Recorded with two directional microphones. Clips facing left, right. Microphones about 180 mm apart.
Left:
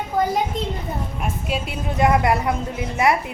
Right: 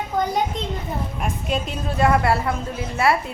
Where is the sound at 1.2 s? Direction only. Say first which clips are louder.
Right 1 dB; 5° left (ahead or behind).